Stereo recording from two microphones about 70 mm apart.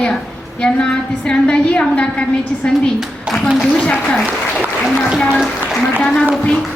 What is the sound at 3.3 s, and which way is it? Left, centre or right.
Speech, centre.